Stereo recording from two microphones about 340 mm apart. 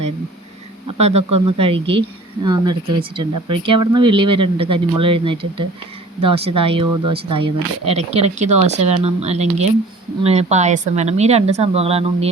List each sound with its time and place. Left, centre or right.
0.9 s speech: centre